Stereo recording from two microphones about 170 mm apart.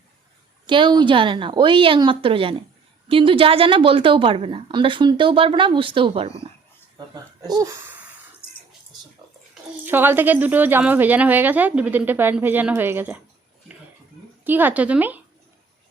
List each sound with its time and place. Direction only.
0.7 s a woman's voice: 30° right (ahead or behind)
7.0 s a woman's voice: 25° right (ahead or behind)
9.8 s speech: 10° right (ahead or behind)
14.4 s speech: 10° right (ahead or behind)